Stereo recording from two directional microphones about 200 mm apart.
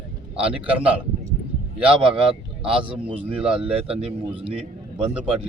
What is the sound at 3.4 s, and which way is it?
Speech, 5° right (ahead or behind).